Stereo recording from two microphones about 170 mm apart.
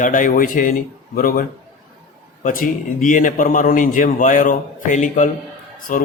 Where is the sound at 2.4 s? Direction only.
50° left (ahead or behind).